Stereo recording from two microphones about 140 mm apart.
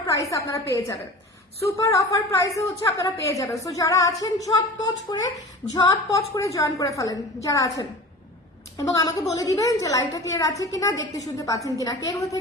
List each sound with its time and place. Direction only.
0.0 s a woman's voice: 25° left (ahead or behind)